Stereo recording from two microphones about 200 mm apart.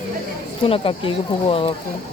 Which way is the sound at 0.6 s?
25° left (ahead or behind).